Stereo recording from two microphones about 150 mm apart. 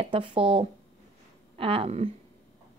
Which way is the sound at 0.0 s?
35° right (ahead or behind).